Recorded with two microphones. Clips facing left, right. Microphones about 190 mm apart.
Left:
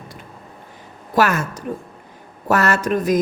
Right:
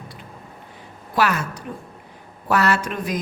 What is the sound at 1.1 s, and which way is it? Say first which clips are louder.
A woman's voice: left 3 dB; 45° left (ahead or behind).